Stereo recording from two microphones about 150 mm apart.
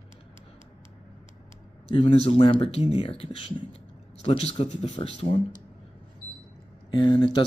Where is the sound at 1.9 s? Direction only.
45° left (ahead or behind).